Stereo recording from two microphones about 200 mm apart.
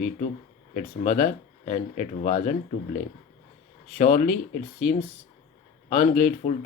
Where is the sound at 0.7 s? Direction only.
40° left (ahead or behind).